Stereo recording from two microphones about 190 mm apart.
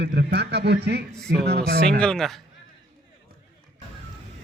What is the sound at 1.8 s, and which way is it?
Speech, 5° left (ahead or behind).